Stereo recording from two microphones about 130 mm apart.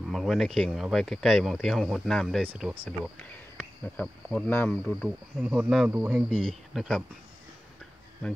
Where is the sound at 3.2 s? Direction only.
15° left (ahead or behind).